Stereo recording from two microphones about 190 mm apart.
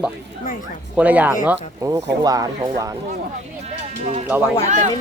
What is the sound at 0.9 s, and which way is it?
Speech, 10° right (ahead or behind).